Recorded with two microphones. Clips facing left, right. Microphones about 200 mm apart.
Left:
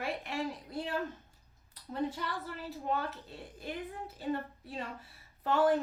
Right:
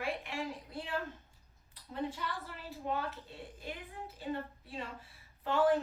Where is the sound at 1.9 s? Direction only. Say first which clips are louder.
Left 3 dB; 40° left (ahead or behind).